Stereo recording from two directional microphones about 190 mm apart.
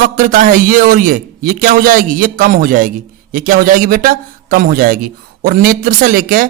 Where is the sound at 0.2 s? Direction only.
45° right (ahead or behind).